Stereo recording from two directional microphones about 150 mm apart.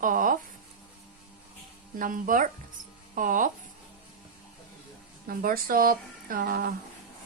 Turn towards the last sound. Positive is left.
turn(degrees=-75)  # may be behind; listen again after turning